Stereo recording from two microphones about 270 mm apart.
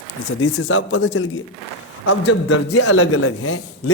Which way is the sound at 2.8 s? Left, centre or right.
Left.